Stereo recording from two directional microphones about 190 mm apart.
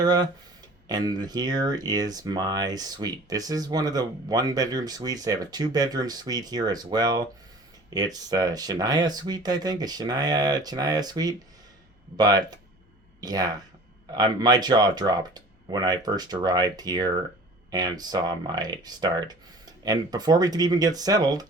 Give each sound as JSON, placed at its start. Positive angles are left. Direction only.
{"t": 0.0, "sound": "speech", "side_deg": -20}